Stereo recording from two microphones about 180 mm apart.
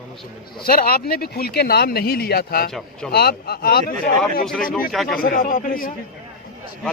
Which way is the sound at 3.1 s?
60° left (ahead or behind).